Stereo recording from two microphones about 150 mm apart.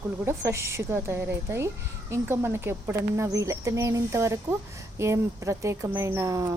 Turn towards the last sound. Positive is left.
turn(degrees=-20)  # may be behind; listen again after turning